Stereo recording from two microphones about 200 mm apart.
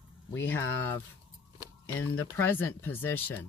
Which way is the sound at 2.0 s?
90° left.